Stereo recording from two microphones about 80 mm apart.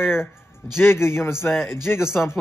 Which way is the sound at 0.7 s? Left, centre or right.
Left.